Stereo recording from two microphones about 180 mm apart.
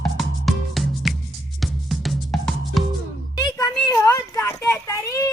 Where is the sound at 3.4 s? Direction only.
20° left (ahead or behind).